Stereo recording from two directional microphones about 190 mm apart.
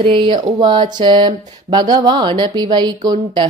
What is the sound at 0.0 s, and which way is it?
Speech, 25° right (ahead or behind).